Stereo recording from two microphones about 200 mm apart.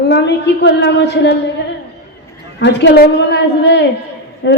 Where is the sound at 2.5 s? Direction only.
60° left (ahead or behind).